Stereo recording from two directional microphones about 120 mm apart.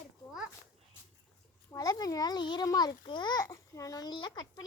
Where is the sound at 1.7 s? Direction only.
30° left (ahead or behind).